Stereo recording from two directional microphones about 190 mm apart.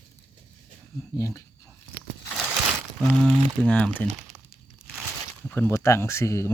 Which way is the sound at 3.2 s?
5° left (ahead or behind).